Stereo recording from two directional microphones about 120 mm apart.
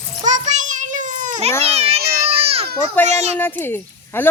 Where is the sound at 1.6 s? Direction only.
60° right (ahead or behind).